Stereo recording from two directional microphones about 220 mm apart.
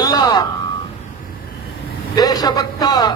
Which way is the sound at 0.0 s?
15° left (ahead or behind).